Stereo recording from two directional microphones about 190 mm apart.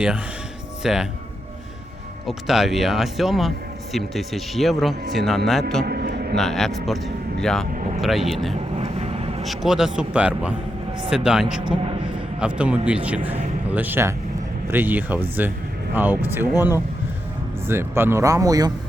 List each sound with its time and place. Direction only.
0.8 s speech: centre (ahead or behind)
2.2 s speech: centre (ahead or behind)
5.8 s a sound: 55° right (ahead or behind)
6.3 s speech: centre (ahead or behind)
8.8 s vehicle: 35° right (ahead or behind)
9.4 s speech: centre (ahead or behind)
11.6 s a man's voice: 30° right (ahead or behind)
12.4 s speech: 5° right (ahead or behind)